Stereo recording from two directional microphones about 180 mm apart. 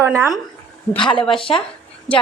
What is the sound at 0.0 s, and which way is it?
Speech, 15° right (ahead or behind).